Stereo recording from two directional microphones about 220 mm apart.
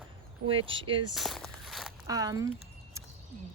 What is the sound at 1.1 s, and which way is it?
Walk, centre (ahead or behind).